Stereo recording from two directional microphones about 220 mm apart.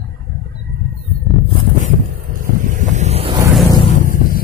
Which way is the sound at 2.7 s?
35° right (ahead or behind).